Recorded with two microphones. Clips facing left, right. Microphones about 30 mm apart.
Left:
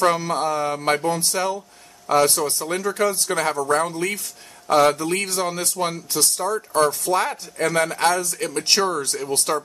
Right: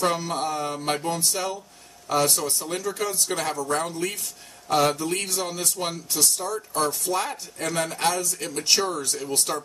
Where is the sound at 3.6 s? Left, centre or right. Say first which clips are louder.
Left 7 dB; left.